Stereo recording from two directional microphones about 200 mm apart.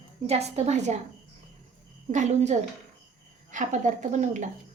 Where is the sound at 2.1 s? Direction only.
35° right (ahead or behind).